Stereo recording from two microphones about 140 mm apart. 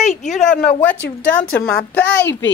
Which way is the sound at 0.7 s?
10° left (ahead or behind).